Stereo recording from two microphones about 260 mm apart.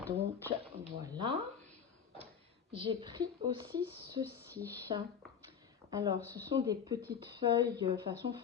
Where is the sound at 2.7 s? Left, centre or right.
Centre.